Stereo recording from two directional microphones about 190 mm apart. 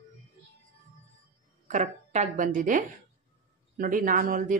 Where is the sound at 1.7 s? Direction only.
40° right (ahead or behind).